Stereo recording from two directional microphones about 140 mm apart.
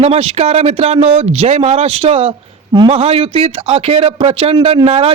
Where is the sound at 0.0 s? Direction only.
45° right (ahead or behind).